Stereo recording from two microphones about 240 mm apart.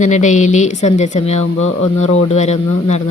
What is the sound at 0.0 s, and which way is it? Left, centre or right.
Speech, left.